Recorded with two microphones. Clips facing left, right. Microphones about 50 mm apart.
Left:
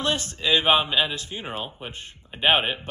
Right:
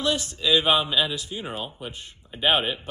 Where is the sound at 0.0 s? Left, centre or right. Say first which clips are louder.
Even; left.